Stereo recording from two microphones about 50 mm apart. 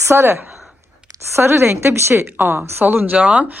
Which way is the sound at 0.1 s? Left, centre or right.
Right.